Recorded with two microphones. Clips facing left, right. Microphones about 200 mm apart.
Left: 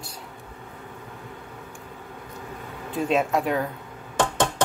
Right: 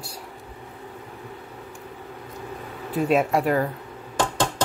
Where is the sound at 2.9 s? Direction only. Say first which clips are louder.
Right 2 dB; 5° right (ahead or behind).